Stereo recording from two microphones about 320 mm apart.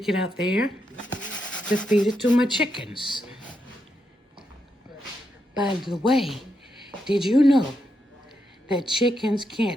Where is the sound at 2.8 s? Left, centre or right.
Centre.